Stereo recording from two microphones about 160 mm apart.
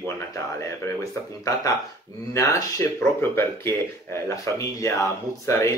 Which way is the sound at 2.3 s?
20° left (ahead or behind).